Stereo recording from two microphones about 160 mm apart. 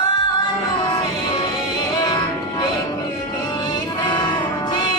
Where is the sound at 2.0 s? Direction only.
30° left (ahead or behind).